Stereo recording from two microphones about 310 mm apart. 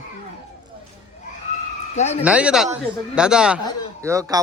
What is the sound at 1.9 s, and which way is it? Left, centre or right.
Speech, left.